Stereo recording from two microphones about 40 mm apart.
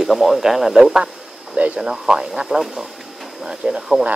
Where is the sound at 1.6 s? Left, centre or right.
Right.